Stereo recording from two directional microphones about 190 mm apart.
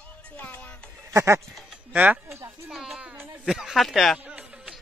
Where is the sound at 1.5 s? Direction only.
5° right (ahead or behind).